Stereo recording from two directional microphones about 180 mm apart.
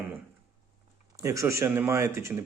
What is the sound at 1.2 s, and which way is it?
Speech, 15° right (ahead or behind).